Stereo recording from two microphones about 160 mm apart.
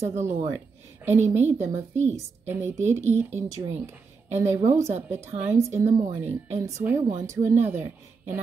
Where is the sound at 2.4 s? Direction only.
15° right (ahead or behind).